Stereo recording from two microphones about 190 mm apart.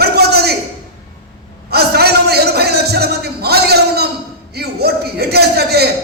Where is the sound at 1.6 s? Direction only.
55° right (ahead or behind).